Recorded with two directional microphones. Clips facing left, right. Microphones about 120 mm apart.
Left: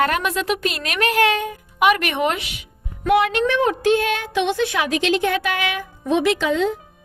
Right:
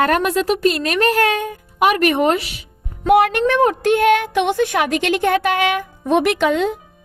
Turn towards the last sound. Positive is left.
turn(degrees=-60)  # may be behind; listen again after turning